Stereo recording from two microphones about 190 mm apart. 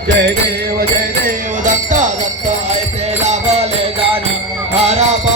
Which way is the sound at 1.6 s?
40° right (ahead or behind).